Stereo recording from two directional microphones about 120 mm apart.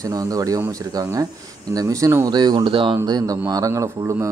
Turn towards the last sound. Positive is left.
turn(degrees=-25)  # may be behind; listen again after turning